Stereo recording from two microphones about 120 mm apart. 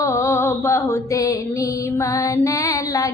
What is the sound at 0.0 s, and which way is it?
Music, 25° left (ahead or behind).